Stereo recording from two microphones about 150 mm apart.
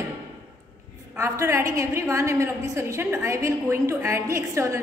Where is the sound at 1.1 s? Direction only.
20° right (ahead or behind).